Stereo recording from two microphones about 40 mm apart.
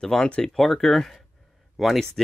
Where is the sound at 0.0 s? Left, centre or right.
Centre.